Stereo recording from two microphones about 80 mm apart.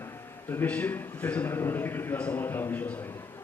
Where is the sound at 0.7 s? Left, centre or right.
Centre.